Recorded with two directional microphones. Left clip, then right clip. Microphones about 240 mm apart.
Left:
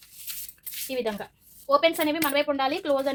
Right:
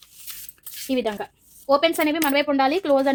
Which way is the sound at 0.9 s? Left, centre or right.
Right.